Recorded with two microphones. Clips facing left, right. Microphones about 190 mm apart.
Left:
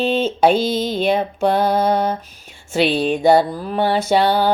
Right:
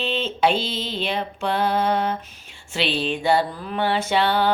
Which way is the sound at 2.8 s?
50° left (ahead or behind).